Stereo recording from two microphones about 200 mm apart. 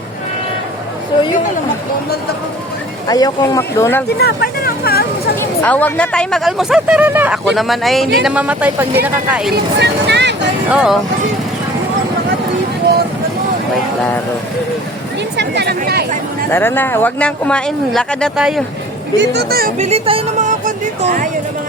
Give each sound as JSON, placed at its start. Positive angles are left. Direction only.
{"t": 3.1, "sound": "speech", "side_deg": 20}
{"t": 4.2, "sound": "speech", "side_deg": 50}
{"t": 5.4, "sound": "speech", "side_deg": 10}
{"t": 9.5, "sound": "speech", "side_deg": -55}
{"t": 10.7, "sound": "speech", "side_deg": -5}
{"t": 15.4, "sound": "chatter", "side_deg": -55}
{"t": 16.5, "sound": "speech", "side_deg": 10}
{"t": 19.2, "sound": "speech", "side_deg": -55}
{"t": 19.8, "sound": "speech", "side_deg": -30}